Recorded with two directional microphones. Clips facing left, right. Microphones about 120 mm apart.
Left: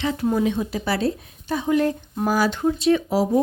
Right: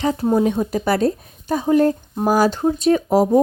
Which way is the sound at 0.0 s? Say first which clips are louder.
Right 4 dB; 40° right (ahead or behind).